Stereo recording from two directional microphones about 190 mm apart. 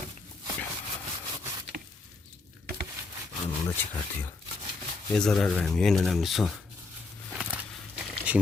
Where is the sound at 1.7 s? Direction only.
55° right (ahead or behind).